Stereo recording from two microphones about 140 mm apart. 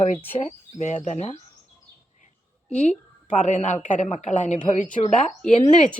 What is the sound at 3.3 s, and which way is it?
Speech, 60° left (ahead or behind).